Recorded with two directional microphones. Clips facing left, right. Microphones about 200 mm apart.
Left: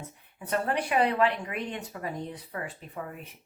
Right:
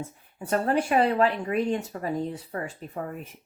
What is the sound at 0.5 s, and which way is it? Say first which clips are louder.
Speech: right 4 dB; 45° right (ahead or behind).